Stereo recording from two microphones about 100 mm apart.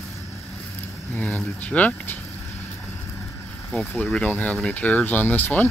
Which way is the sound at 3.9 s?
15° left (ahead or behind).